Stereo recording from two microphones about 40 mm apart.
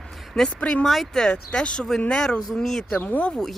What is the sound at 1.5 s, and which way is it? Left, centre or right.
Speech, left.